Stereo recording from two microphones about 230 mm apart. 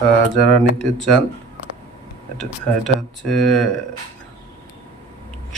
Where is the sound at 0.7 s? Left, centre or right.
Centre.